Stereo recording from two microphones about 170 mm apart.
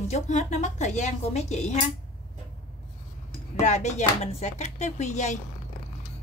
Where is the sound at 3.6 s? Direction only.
45° left (ahead or behind).